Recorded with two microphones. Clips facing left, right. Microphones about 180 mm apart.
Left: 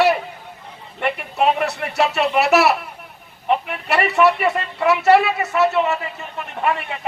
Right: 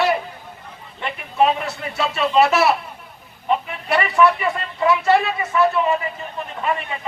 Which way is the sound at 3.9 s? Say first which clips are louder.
Even; 70° left (ahead or behind).